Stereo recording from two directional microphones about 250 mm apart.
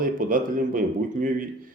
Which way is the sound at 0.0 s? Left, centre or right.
Right.